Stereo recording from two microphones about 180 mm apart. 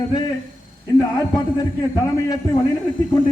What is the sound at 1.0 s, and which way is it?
Speech, 20° left (ahead or behind).